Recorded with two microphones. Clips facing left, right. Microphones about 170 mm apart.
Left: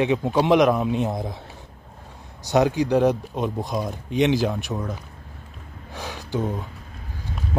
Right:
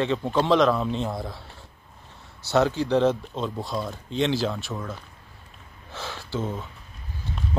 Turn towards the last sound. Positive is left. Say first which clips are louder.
# left 3 dB
turn(degrees=15)  # may be behind; listen again after turning